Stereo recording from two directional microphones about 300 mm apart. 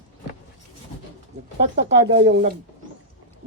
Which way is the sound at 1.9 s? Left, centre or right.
Right.